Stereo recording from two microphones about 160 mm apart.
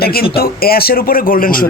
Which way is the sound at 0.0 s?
70° left (ahead or behind).